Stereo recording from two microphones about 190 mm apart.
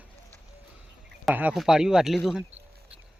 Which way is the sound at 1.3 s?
5° right (ahead or behind).